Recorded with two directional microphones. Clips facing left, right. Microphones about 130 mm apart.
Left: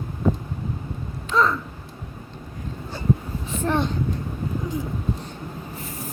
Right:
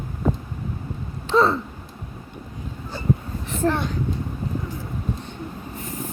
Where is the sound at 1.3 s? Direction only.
30° right (ahead or behind).